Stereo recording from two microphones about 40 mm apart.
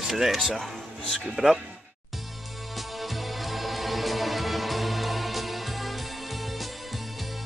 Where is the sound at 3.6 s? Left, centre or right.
Centre.